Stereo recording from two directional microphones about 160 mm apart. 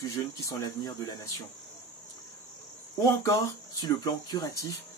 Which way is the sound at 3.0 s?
20° left (ahead or behind).